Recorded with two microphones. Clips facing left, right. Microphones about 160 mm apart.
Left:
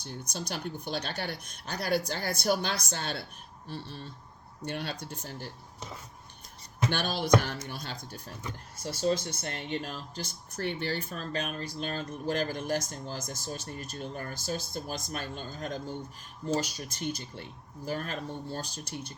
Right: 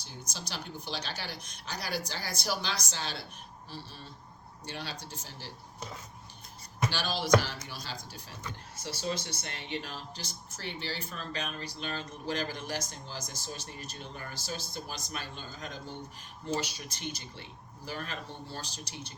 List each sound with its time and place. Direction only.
0.0 s speech: 55° left (ahead or behind)
6.9 s speech: 55° left (ahead or behind)